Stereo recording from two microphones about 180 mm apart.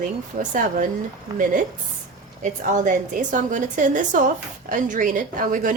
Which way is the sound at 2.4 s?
45° right (ahead or behind).